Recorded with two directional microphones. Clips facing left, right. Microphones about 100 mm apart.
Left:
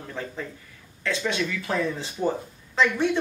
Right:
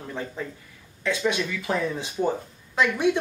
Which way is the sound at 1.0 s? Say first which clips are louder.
Right 2 dB; 15° right (ahead or behind).